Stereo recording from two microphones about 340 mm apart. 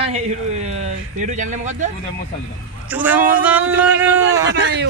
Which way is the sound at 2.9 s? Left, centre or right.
Centre.